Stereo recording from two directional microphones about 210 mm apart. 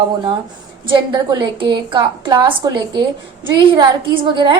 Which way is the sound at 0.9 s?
20° right (ahead or behind).